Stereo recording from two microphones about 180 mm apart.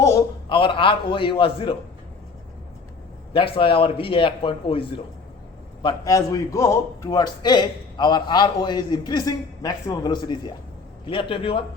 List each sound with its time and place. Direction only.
0.0 s a sound: 15° left (ahead or behind)
0.4 s a man's voice: 30° left (ahead or behind)
3.3 s a man's voice: 30° left (ahead or behind)
5.8 s a man's voice: 20° left (ahead or behind)